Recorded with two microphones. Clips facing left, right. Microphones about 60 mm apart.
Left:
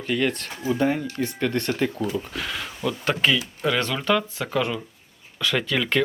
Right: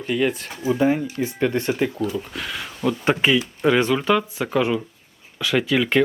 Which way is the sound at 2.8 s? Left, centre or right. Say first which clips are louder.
Right 4 dB; right.